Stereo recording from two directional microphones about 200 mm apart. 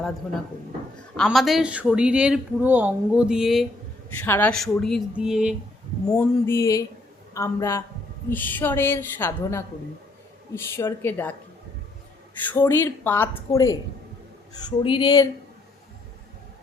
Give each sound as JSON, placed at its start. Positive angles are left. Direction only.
{"t": 1.1, "sound": "speech", "side_deg": 0}
{"t": 6.1, "sound": "a woman's voice", "side_deg": 10}
{"t": 12.5, "sound": "a woman's voice", "side_deg": 10}